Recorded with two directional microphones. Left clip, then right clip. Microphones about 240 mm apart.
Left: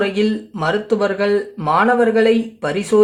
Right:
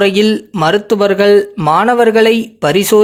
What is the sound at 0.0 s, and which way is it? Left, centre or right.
Speech, right.